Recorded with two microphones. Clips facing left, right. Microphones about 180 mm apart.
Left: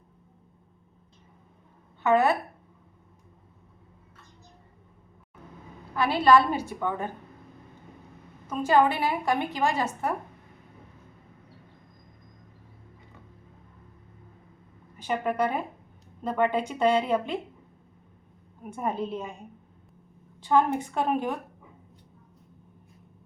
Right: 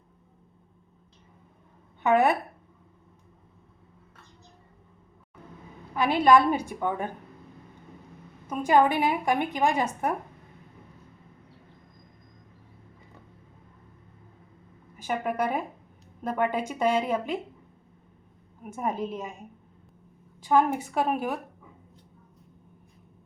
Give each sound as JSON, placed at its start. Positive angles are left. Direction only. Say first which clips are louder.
{"t": 2.0, "sound": "a woman's voice", "louder": "even", "side_deg": -15}
{"t": 5.9, "sound": "a woman's voice", "louder": "even", "side_deg": -15}
{"t": 8.4, "sound": "a woman's voice", "louder": "right 1 dB", "side_deg": -15}
{"t": 14.9, "sound": "a woman's voice", "louder": "left 1 dB", "side_deg": -10}
{"t": 18.6, "sound": "a woman's voice", "louder": "even", "side_deg": -5}
{"t": 20.4, "sound": "a woman's voice", "louder": "even", "side_deg": -10}